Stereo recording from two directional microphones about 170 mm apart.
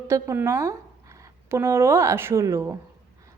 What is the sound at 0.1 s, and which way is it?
A woman's voice, 15° right (ahead or behind).